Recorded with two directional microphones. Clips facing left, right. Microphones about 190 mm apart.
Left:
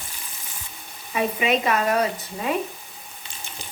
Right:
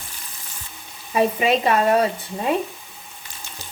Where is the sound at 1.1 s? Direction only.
35° right (ahead or behind).